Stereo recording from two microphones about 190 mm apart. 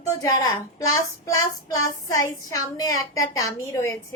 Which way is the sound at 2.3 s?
20° left (ahead or behind).